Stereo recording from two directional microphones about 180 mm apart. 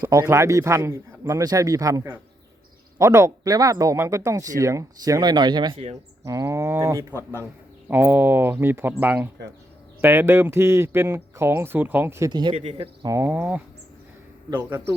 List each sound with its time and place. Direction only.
0.0 s speech: 15° right (ahead or behind); by 6.0 s 30° right (ahead or behind)
6.2 s speech: 15° right (ahead or behind)